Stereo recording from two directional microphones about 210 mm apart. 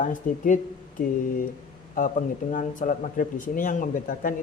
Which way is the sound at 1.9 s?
40° left (ahead or behind).